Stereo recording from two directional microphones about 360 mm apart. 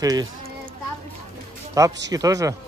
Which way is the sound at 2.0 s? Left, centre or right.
Centre.